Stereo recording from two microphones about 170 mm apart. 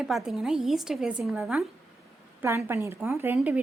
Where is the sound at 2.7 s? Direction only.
15° right (ahead or behind).